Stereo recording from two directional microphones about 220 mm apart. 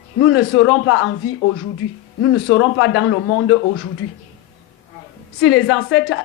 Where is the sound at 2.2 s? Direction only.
65° left (ahead or behind).